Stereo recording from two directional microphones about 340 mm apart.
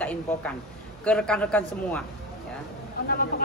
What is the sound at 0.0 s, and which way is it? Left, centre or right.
A woman's voice, centre.